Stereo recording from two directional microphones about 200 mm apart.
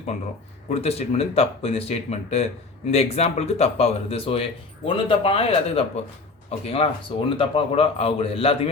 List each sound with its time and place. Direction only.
0.7 s a man's voice: 30° left (ahead or behind)